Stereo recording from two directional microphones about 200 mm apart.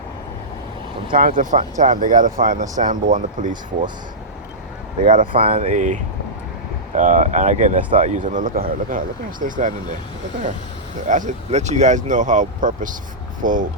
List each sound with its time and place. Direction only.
1.1 s speech: 40° right (ahead or behind)
5.0 s speech: 40° right (ahead or behind)
5.3 s speech: 30° right (ahead or behind)
5.5 s speech: 40° right (ahead or behind)
11.1 s speech: 40° right (ahead or behind)